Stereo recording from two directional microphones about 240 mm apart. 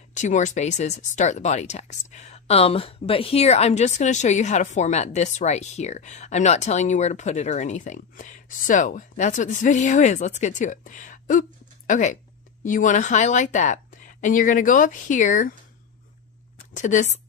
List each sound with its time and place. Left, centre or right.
0.1 s a woman's voice: left
16.7 s a woman's voice: left